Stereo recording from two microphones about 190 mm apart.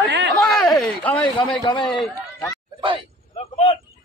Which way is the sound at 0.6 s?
Centre (ahead or behind).